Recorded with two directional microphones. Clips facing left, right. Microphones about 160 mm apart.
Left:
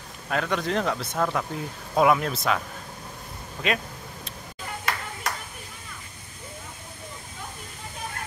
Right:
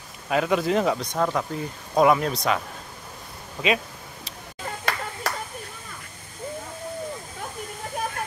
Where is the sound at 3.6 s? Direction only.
Centre (ahead or behind).